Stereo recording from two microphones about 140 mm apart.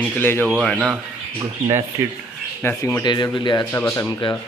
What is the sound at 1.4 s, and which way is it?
Speech, 20° right (ahead or behind).